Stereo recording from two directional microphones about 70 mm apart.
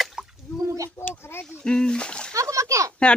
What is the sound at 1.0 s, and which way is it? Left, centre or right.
Speech, left.